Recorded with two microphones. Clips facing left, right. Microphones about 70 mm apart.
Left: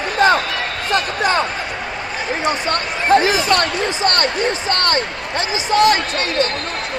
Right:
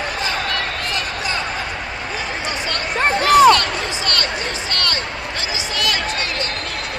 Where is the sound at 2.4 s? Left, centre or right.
Left.